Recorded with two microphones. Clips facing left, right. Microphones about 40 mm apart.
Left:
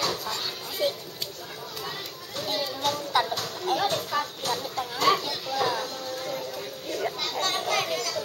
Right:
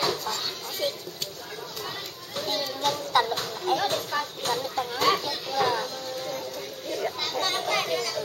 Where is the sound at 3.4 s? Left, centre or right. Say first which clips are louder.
Even; centre.